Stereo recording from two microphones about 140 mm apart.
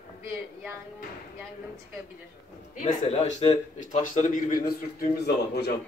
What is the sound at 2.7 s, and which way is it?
Speech, 60° left (ahead or behind).